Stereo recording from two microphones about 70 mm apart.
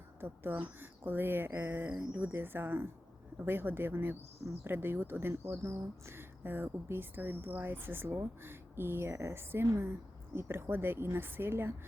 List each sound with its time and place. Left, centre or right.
0.2 s speech: right